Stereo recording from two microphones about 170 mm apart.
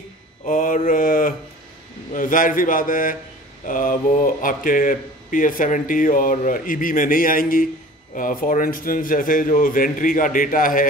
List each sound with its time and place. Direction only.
0.5 s a man's voice: 50° left (ahead or behind)